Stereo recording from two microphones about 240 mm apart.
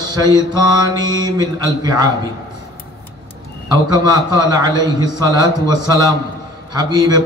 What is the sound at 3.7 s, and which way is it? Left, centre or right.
A man's voice, centre.